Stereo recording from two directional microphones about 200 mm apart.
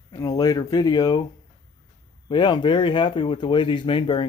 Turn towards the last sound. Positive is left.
turn(degrees=25)  # may be behind; listen again after turning